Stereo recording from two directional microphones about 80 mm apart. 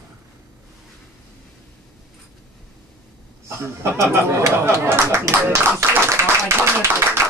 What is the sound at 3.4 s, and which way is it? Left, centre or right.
Speech, right.